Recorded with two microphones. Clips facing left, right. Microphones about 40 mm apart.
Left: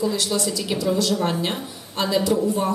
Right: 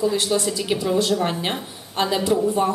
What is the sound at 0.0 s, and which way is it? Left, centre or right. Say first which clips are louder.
A woman's voice: right 2 dB; right.